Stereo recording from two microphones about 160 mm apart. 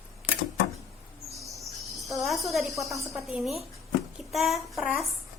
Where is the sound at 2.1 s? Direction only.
Centre (ahead or behind).